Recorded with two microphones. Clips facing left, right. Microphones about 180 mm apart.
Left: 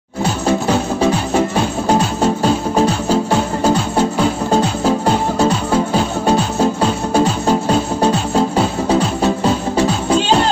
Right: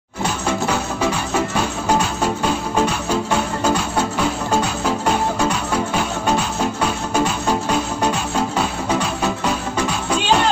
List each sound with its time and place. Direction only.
0.5 s music: 30° left (ahead or behind)